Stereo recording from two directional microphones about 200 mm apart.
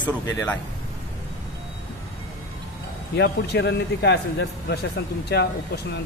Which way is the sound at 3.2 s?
55° left (ahead or behind).